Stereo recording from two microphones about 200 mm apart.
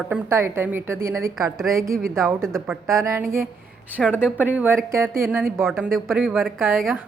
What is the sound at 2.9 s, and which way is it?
A woman's voice, 15° right (ahead or behind).